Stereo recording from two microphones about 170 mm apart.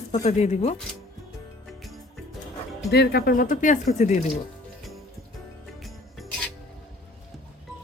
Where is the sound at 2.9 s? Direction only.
70° left (ahead or behind); by 4.2 s 45° left (ahead or behind).